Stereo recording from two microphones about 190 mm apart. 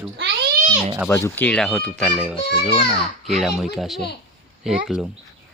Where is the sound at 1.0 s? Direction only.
15° left (ahead or behind); by 5.0 s centre (ahead or behind).